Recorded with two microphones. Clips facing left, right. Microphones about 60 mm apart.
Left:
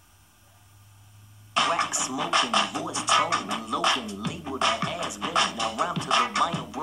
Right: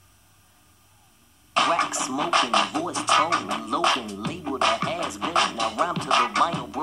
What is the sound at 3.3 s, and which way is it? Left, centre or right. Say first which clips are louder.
Speech: right 3 dB; right.